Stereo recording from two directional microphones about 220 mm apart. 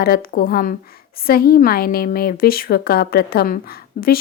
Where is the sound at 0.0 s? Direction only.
45° left (ahead or behind).